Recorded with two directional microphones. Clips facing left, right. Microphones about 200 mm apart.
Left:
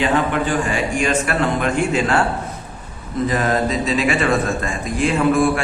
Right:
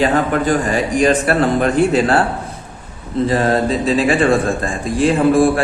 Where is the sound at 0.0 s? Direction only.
40° right (ahead or behind).